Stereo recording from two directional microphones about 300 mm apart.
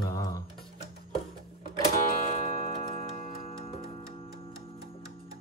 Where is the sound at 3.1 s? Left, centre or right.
Left.